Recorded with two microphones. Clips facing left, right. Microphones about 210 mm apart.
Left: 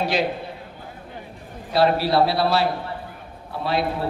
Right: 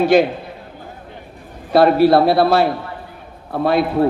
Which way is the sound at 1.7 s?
50° right (ahead or behind).